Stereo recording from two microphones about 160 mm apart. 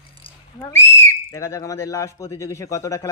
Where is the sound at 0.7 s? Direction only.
20° left (ahead or behind).